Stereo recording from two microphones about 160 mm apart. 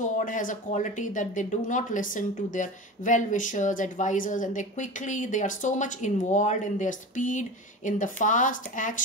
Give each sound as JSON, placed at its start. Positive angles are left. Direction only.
{"t": 0.0, "sound": "speech", "side_deg": 55}